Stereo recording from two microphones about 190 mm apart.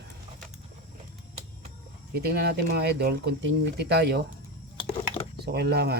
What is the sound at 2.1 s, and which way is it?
Speech, 55° right (ahead or behind).